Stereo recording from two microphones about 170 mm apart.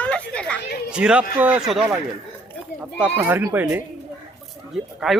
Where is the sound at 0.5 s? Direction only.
70° left (ahead or behind).